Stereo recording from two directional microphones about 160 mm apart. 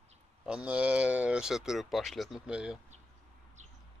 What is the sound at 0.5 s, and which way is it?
Speech, 5° right (ahead or behind).